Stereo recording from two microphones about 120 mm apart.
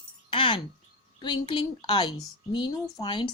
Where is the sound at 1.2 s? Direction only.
40° left (ahead or behind).